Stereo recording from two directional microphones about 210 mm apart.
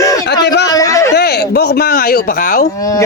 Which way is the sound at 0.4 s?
55° left (ahead or behind).